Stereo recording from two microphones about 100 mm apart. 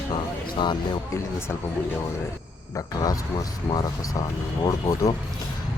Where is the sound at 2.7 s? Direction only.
35° left (ahead or behind).